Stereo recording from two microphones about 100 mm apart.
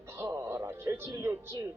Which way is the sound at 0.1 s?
25° right (ahead or behind).